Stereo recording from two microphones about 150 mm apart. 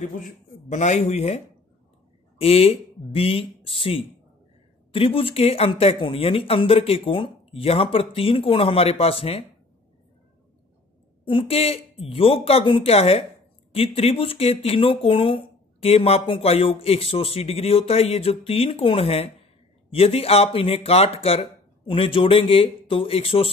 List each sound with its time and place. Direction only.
0.0 s speech: 55° left (ahead or behind)
2.4 s speech: 40° left (ahead or behind)
11.2 s speech: 35° left (ahead or behind)